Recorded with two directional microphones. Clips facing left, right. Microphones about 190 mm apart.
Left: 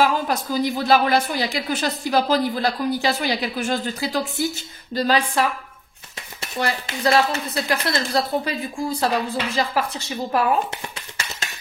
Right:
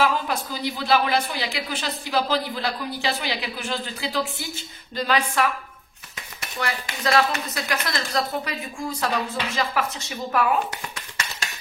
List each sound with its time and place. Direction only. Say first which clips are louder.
0.0 s a woman's voice: left 3 dB; 45° left (ahead or behind)